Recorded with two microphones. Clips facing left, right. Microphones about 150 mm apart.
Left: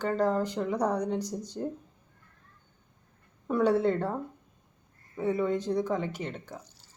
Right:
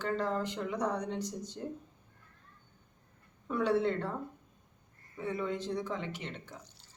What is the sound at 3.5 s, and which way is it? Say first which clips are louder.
Speech: left 5 dB; 40° left (ahead or behind).